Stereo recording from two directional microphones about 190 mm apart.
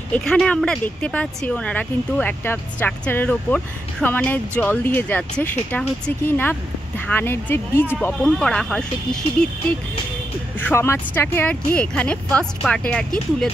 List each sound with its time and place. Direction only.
0.1 s speech: 5° left (ahead or behind)